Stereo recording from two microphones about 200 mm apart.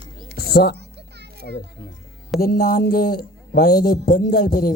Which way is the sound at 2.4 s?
45° left (ahead or behind).